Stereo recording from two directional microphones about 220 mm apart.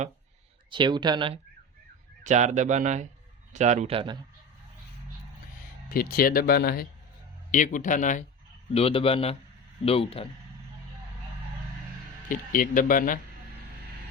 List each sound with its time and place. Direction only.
0.7 s speech: 20° right (ahead or behind)
2.2 s a man's voice: 30° right (ahead or behind)
5.9 s speech: 40° left (ahead or behind)
8.7 s a man's voice: 25° left (ahead or behind)
12.3 s speech: 40° left (ahead or behind)